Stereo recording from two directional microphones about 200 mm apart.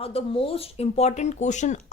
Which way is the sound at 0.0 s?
30° left (ahead or behind).